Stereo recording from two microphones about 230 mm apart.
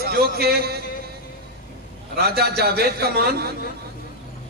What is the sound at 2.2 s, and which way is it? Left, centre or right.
A man's voice, right.